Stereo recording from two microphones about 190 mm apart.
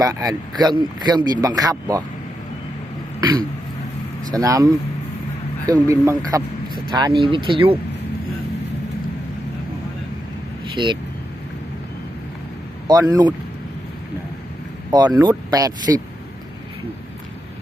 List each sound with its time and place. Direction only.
0.0 s speech: 20° right (ahead or behind)
3.2 s throat clearing: 20° right (ahead or behind)
4.3 s speech: 20° right (ahead or behind)
10.8 s speech: 25° right (ahead or behind)
12.9 s speech: 20° right (ahead or behind)
14.8 s speech: 20° right (ahead or behind)